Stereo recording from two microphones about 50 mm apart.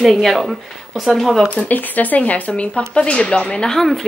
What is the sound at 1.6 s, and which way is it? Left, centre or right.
Speech, left.